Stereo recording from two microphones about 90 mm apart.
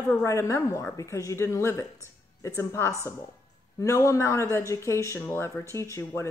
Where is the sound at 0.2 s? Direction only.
35° left (ahead or behind).